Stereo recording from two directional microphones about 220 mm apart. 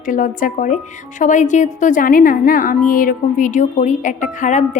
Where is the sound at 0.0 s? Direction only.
35° left (ahead or behind).